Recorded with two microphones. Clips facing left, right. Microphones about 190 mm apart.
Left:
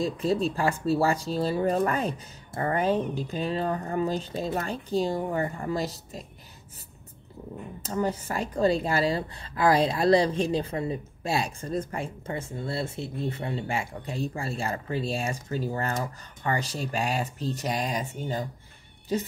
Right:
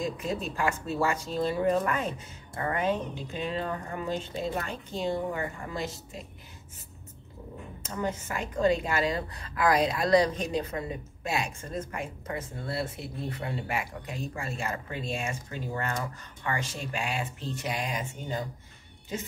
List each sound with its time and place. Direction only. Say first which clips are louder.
0.0 s speech: left 6 dB; 30° left (ahead or behind)
7.8 s speech: left 4 dB; 35° left (ahead or behind)